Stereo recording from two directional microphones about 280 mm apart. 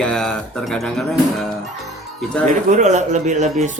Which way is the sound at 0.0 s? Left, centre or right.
Centre.